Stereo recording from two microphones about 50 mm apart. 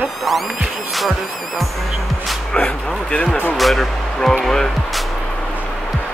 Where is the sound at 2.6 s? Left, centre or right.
Left.